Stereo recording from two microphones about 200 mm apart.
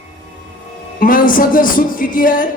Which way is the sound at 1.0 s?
45° left (ahead or behind).